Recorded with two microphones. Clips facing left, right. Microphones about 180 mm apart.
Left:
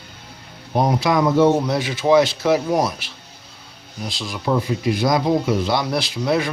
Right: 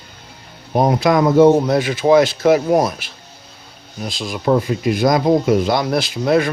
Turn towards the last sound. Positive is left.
turn(degrees=-50)  # may be behind; listen again after turning